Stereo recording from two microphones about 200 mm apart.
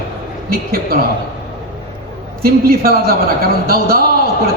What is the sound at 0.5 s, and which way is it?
Speech, 50° right (ahead or behind).